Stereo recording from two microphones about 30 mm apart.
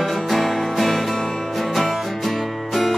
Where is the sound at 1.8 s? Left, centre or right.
Centre.